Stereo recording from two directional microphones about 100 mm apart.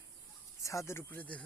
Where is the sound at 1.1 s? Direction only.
15° left (ahead or behind).